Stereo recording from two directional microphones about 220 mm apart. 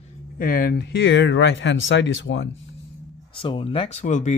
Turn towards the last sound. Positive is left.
turn(degrees=35)  # may be behind; listen again after turning